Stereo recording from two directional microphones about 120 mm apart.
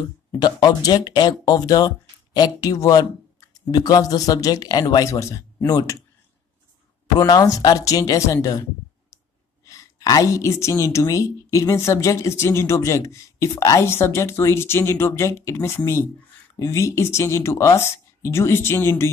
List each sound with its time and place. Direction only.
0.4 s speech: 35° left (ahead or behind)
7.2 s a woman's voice: 30° left (ahead or behind)
9.7 s a woman's voice: 30° left (ahead or behind)